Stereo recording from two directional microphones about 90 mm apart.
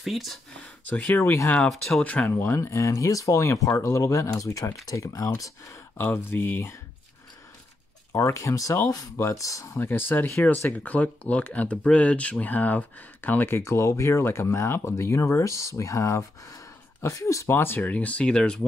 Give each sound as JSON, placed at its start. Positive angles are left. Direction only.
{"t": 0.0, "sound": "speech", "side_deg": 0}
{"t": 0.5, "sound": "speech", "side_deg": 15}
{"t": 1.7, "sound": "speech", "side_deg": 0}
{"t": 2.0, "sound": "speech", "side_deg": 15}
{"t": 6.1, "sound": "speech", "side_deg": 20}
{"t": 8.1, "sound": "speech", "side_deg": 35}
{"t": 9.8, "sound": "speech", "side_deg": 25}
{"t": 13.7, "sound": "speech", "side_deg": 30}